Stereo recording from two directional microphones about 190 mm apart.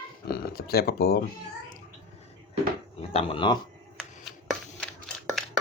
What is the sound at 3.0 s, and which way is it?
Speech, 30° left (ahead or behind).